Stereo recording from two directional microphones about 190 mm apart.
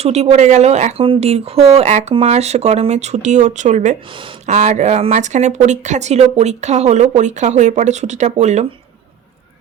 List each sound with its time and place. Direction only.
0.0 s speech: 35° right (ahead or behind)